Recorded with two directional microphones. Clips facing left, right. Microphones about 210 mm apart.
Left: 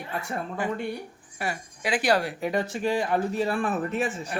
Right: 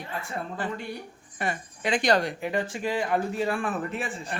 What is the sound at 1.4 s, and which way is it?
Speech, 5° left (ahead or behind).